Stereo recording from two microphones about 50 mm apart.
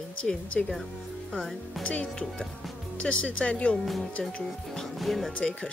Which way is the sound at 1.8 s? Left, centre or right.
Left.